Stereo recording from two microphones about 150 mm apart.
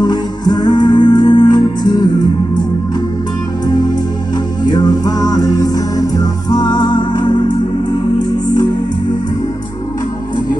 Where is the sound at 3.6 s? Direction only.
30° left (ahead or behind).